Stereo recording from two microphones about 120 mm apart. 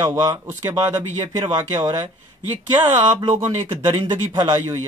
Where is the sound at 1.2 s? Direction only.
35° right (ahead or behind).